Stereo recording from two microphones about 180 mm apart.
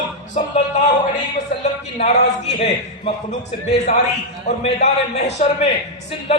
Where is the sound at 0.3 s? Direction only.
45° left (ahead or behind).